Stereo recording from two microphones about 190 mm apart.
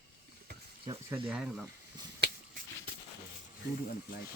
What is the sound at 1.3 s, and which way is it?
Speech, centre (ahead or behind).